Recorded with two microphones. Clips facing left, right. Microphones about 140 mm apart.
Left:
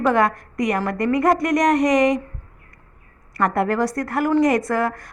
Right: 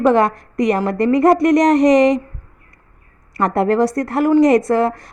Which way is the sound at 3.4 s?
25° right (ahead or behind).